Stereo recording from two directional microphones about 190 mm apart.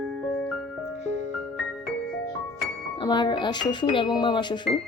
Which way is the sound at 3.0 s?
25° left (ahead or behind).